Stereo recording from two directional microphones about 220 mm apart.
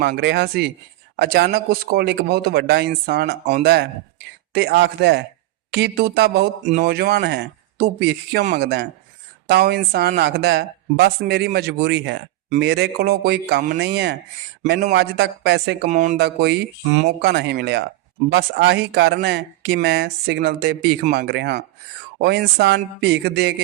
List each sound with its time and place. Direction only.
0.0 s speech: 50° right (ahead or behind)
15.9 s speech: 35° right (ahead or behind)
16.2 s speech: 50° right (ahead or behind)